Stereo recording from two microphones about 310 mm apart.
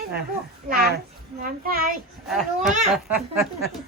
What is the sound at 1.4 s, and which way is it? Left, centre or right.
Speech, right.